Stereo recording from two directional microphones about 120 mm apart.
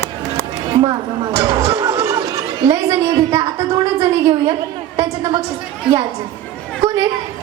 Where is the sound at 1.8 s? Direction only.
25° right (ahead or behind).